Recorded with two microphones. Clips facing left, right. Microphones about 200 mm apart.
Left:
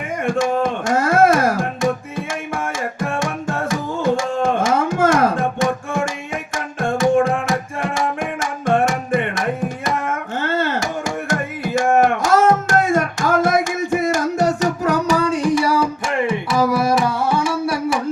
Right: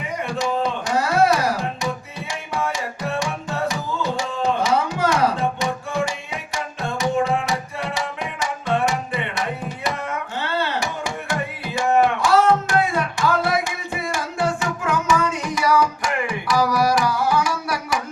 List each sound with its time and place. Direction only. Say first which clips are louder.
0.3 s music: left 5 dB; 50° left (ahead or behind); by 17.7 s 25° left (ahead or behind)